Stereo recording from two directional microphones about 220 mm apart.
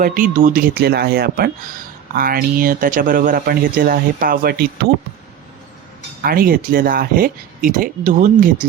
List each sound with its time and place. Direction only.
0.0 s speech: 35° right (ahead or behind)
6.2 s speech: 40° right (ahead or behind)